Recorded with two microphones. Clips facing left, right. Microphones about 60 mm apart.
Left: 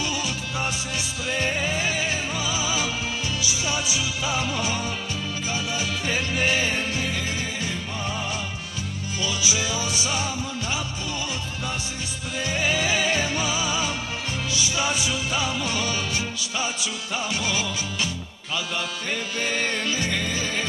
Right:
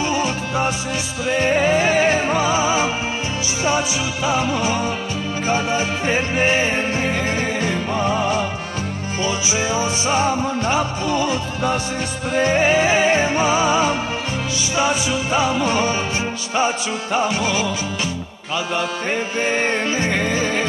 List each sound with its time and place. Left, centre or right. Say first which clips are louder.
0.0 s music: right 8 dB; right
9.2 s music: right 5 dB; right
19.4 s music: right 6 dB; right